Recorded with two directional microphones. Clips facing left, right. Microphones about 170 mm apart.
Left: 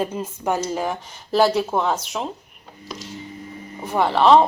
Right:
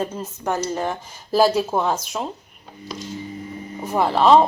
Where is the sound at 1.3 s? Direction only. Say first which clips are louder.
Right 1 dB; 5° right (ahead or behind).